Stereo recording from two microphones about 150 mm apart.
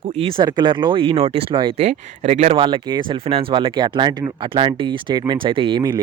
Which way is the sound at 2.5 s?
35° right (ahead or behind).